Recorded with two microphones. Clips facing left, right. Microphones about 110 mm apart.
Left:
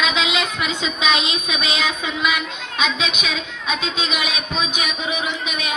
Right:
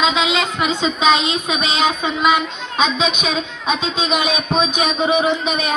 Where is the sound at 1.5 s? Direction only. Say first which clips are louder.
Right 7 dB; 25° right (ahead or behind).